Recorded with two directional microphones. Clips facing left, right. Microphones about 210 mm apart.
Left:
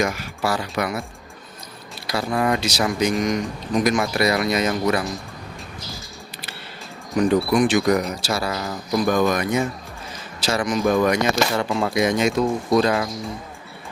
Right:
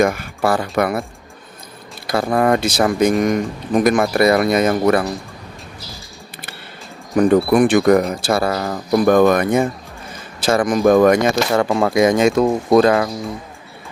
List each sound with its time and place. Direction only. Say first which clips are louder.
0.0 s speech: right 6 dB; 55° right (ahead or behind)
2.0 s speech: right 6 dB; 50° right (ahead or behind)
7.2 s speech: right 5 dB; 55° right (ahead or behind)